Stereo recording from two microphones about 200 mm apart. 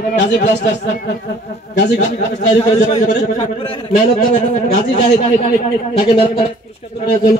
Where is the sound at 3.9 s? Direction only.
40° left (ahead or behind).